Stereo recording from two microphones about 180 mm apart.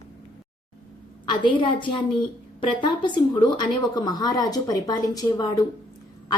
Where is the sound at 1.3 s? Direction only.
25° left (ahead or behind).